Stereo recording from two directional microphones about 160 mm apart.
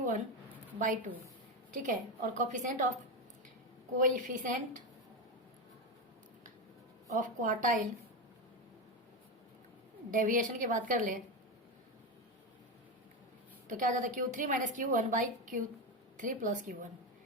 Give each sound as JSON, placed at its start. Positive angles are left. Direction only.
{"t": 0.8, "sound": "a woman's voice", "side_deg": -55}
{"t": 3.9, "sound": "a woman's voice", "side_deg": -55}
{"t": 7.1, "sound": "a woman's voice", "side_deg": -55}
{"t": 10.1, "sound": "a woman's voice", "side_deg": -55}
{"t": 13.7, "sound": "a woman's voice", "side_deg": -55}